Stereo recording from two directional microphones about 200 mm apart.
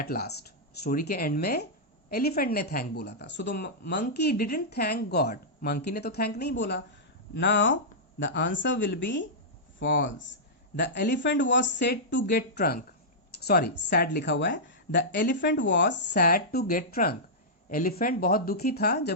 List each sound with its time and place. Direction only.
0.0 s speech: 50° left (ahead or behind)